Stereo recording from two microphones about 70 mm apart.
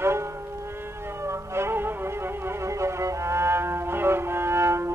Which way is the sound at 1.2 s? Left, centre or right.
Right.